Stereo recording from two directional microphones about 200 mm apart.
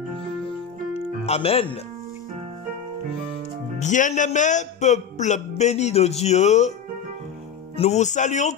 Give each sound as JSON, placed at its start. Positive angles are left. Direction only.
{"t": 0.9, "sound": "music", "side_deg": 30}
{"t": 3.8, "sound": "a man's voice", "side_deg": 40}
{"t": 7.7, "sound": "a man's voice", "side_deg": 30}